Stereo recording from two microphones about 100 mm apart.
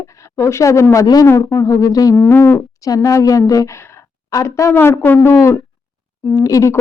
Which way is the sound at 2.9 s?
30° left (ahead or behind).